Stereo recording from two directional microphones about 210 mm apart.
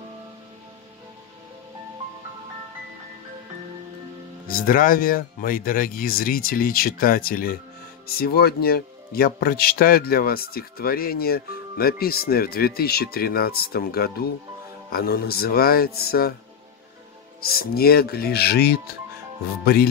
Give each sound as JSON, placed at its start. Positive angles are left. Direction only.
{"t": 4.5, "sound": "a man's voice", "side_deg": 40}
{"t": 17.5, "sound": "a man's voice", "side_deg": 45}